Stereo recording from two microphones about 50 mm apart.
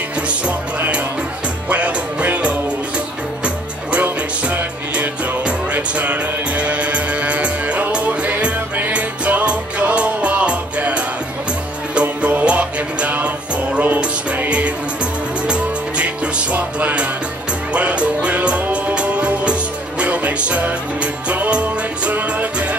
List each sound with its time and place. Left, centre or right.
0.3 s music: right
3.4 s music: right